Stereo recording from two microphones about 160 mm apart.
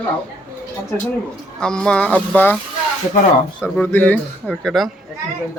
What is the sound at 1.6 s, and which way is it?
Speech, 5° left (ahead or behind).